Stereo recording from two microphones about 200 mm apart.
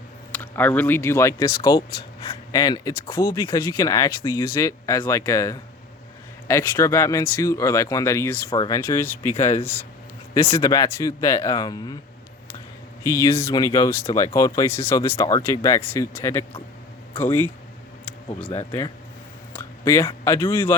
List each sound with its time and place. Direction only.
0.3 s speech: 10° left (ahead or behind)
10.6 s speech: 15° left (ahead or behind)
13.1 s speech: 15° left (ahead or behind)
19.5 s a sound: 10° left (ahead or behind)
20.1 s speech: 15° left (ahead or behind)